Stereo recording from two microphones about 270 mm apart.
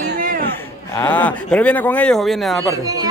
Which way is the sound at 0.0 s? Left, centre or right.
Right.